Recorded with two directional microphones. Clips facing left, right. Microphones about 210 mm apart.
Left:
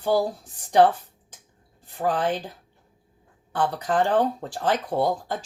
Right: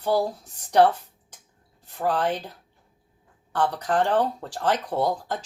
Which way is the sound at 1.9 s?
10° left (ahead or behind).